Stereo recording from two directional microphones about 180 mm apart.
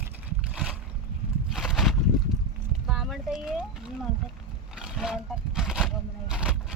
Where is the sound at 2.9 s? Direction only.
Centre (ahead or behind).